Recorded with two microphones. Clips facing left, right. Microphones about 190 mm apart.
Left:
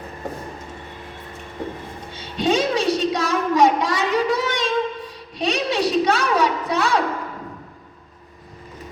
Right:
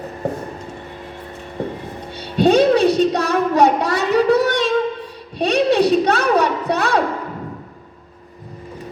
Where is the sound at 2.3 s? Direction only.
60° right (ahead or behind).